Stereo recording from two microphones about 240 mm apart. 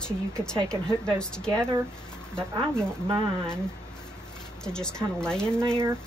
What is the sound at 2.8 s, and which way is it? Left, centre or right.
Speech, centre.